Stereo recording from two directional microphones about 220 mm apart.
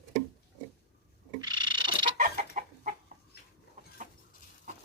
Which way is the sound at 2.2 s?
35° right (ahead or behind).